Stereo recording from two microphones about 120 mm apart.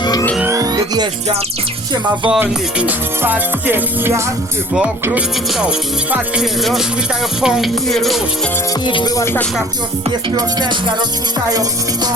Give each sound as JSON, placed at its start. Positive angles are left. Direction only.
{"t": 0.0, "sound": "music", "side_deg": 35}
{"t": 0.4, "sound": "music", "side_deg": -30}
{"t": 2.4, "sound": "music", "side_deg": -15}
{"t": 5.5, "sound": "music", "side_deg": -10}
{"t": 8.9, "sound": "music", "side_deg": 45}
{"t": 9.1, "sound": "speech", "side_deg": 20}
{"t": 10.3, "sound": "music", "side_deg": -40}